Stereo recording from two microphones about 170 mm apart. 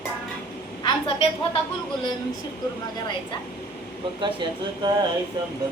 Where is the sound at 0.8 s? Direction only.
30° left (ahead or behind).